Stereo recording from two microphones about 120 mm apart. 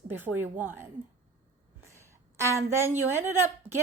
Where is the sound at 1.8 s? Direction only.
25° right (ahead or behind).